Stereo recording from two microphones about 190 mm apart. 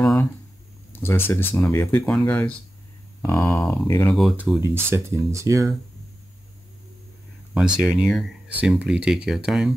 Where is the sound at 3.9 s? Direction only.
15° left (ahead or behind).